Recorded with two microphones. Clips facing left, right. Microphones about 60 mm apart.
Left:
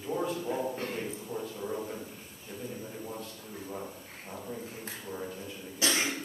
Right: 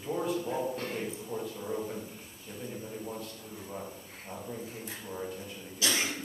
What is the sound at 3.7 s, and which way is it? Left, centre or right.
Speech, centre.